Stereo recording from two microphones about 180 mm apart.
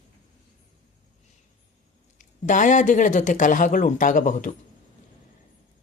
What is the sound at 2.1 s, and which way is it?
Speech, 45° left (ahead or behind).